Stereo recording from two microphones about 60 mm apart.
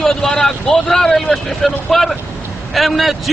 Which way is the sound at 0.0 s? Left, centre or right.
Centre.